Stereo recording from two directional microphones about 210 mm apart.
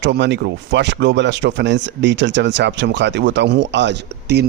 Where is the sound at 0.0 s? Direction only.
55° right (ahead or behind).